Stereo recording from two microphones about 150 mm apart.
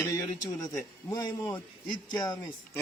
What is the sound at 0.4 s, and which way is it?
Speech, 25° left (ahead or behind).